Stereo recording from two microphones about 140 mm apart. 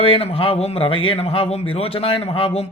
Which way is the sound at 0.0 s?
45° left (ahead or behind).